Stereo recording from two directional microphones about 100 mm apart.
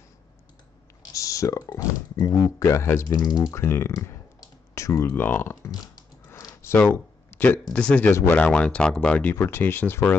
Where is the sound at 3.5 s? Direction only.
25° left (ahead or behind).